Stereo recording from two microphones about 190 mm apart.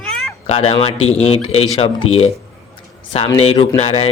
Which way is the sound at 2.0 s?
90° left.